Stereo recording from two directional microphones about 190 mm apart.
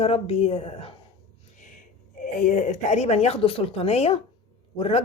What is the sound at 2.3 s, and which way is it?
Speech, 40° left (ahead or behind).